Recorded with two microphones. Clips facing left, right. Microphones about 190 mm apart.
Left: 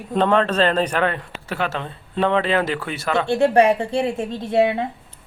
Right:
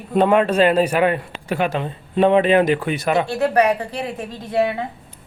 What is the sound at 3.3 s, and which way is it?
A woman's voice, 25° left (ahead or behind).